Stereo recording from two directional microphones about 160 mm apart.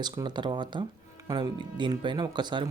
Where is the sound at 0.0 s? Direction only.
25° right (ahead or behind).